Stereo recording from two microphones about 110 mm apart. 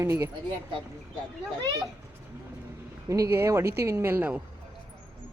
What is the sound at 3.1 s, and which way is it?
Speech, 25° right (ahead or behind).